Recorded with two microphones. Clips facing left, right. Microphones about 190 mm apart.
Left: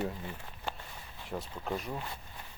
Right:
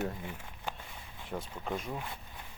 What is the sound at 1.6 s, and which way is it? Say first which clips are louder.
Speech: left 1 dB; centre (ahead or behind).